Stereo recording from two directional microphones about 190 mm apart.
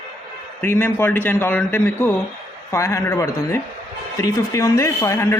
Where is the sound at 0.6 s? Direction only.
10° left (ahead or behind).